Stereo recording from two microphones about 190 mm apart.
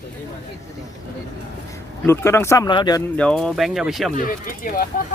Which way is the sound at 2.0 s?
10° left (ahead or behind).